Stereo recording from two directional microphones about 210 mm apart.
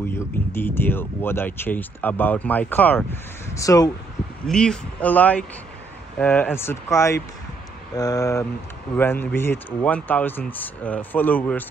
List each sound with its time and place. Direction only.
0.5 s speech: 10° left (ahead or behind)
4.5 s speech: 5° left (ahead or behind)